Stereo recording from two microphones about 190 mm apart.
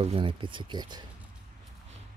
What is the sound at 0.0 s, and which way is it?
Speech, 30° right (ahead or behind).